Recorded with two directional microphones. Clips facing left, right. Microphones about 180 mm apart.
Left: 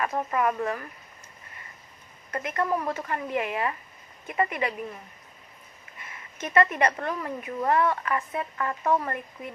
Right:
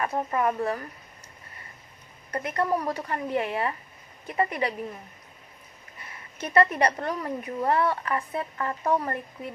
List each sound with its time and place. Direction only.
0.0 s speech: 30° right (ahead or behind)
2.3 s speech: 35° right (ahead or behind)
6.0 s a sound: 35° right (ahead or behind)
7.0 s speech: 35° right (ahead or behind)